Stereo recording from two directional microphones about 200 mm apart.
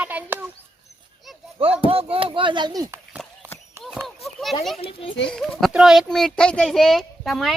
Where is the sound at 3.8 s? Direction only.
10° right (ahead or behind).